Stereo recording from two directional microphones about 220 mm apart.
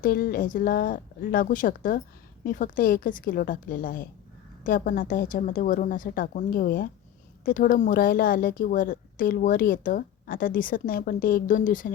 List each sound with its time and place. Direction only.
0.0 s a woman's voice: 40° left (ahead or behind)